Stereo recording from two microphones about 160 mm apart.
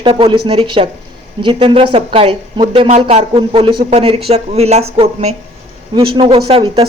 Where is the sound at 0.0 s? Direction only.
35° right (ahead or behind).